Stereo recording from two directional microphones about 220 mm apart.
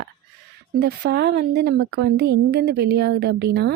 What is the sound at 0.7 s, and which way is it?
Speech, 50° right (ahead or behind).